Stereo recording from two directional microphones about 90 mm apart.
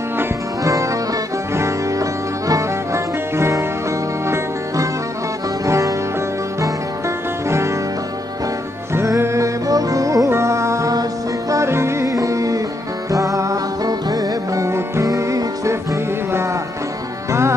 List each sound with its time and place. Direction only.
0.2 s music: 35° right (ahead or behind)
5.7 s music: 35° right (ahead or behind)
7.4 s music: 30° right (ahead or behind)
8.9 s music: 30° right (ahead or behind)